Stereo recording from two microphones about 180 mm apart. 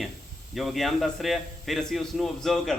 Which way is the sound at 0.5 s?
Centre (ahead or behind).